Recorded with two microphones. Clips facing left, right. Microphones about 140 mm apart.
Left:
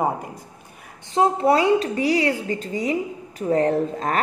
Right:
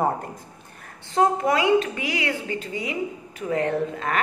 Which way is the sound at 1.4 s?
35° left (ahead or behind).